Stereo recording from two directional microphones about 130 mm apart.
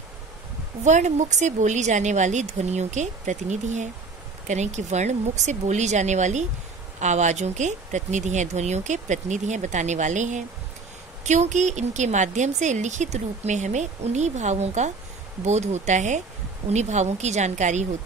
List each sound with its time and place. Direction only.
0.8 s a woman's voice: 65° right (ahead or behind)